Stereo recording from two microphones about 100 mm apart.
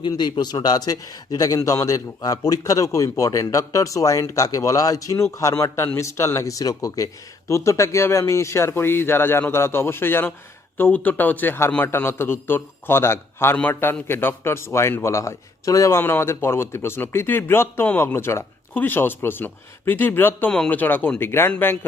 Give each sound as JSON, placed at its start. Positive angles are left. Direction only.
{"t": 0.1, "sound": "a man's voice", "side_deg": 45}